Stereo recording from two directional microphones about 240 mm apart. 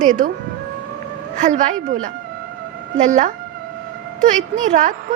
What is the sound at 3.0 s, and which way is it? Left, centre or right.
A woman's voice, right.